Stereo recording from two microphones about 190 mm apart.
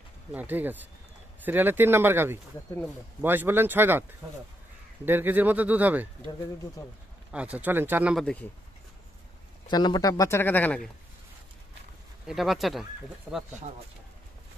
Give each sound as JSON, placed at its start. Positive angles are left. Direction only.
{"t": 0.3, "sound": "speech", "side_deg": -10}
{"t": 5.0, "sound": "speech", "side_deg": -10}
{"t": 6.8, "sound": "speech", "side_deg": 20}
{"t": 7.2, "sound": "speech", "side_deg": -5}
{"t": 9.7, "sound": "speech", "side_deg": 20}
{"t": 12.3, "sound": "speech", "side_deg": 0}